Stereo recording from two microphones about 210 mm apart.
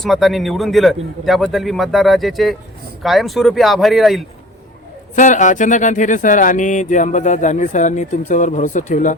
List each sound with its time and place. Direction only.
0.0 s a man's voice: centre (ahead or behind)
5.1 s speech: 35° left (ahead or behind)